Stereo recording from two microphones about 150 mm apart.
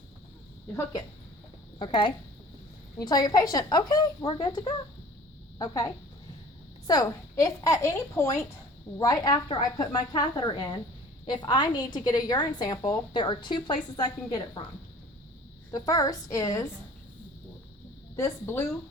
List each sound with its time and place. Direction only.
1.8 s a woman's voice: 35° left (ahead or behind)
15.7 s a woman's voice: 25° left (ahead or behind)
18.2 s speech: 15° left (ahead or behind)